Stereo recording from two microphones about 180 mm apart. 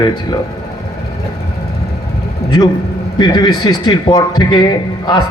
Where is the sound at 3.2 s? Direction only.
20° left (ahead or behind).